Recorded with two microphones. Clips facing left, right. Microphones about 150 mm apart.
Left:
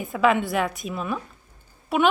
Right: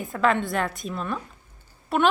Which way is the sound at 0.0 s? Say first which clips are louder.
Left 2 dB; 5° left (ahead or behind).